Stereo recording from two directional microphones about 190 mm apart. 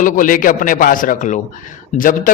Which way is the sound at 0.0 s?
45° left (ahead or behind).